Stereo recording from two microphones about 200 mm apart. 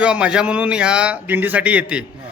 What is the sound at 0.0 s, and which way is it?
Speech, 5° right (ahead or behind).